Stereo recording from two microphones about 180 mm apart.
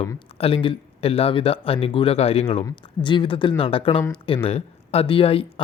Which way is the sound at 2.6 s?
25° left (ahead or behind).